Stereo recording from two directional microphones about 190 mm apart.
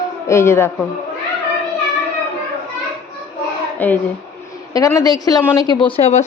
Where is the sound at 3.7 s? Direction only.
10° left (ahead or behind).